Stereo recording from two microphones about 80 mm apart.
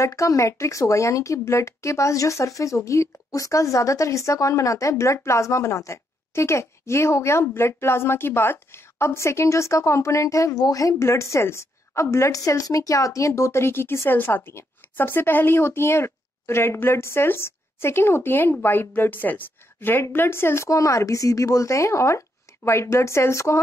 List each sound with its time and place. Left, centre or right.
0.0 s speech: left